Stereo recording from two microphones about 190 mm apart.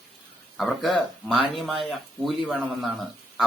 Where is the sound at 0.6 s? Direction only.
Centre (ahead or behind).